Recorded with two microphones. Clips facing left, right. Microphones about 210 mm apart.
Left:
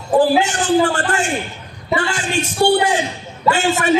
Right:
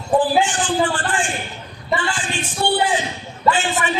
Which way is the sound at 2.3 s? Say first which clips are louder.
Left 8 dB; 45° left (ahead or behind).